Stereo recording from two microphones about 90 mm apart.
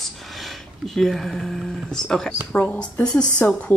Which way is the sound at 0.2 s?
Centre (ahead or behind).